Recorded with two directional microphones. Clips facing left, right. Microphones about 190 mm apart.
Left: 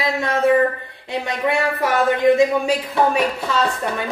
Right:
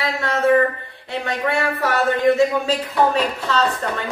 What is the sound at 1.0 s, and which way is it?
A woman's voice, 15° left (ahead or behind).